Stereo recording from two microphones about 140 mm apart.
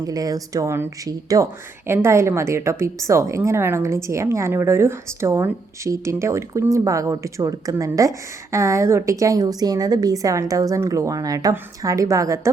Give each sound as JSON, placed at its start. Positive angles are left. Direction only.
{"t": 0.0, "sound": "a woman's voice", "side_deg": -25}